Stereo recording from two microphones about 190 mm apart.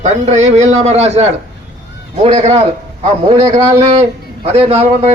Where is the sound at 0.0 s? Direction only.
40° right (ahead or behind).